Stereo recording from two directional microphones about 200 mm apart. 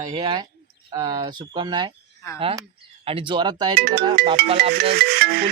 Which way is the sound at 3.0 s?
25° right (ahead or behind).